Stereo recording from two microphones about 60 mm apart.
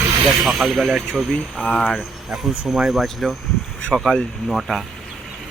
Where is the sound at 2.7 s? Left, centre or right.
Centre.